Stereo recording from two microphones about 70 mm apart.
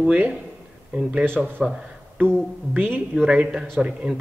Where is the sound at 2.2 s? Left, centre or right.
Right.